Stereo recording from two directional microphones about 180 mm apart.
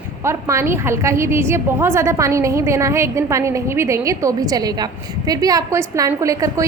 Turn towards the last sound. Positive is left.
turn(degrees=-20)  # may be behind; listen again after turning